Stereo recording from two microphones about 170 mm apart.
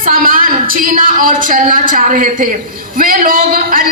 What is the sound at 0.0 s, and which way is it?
A woman's voice, 55° right (ahead or behind).